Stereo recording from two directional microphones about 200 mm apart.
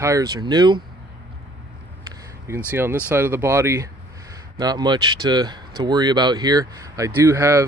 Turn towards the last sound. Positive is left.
turn(degrees=-15)  # may be behind; listen again after turning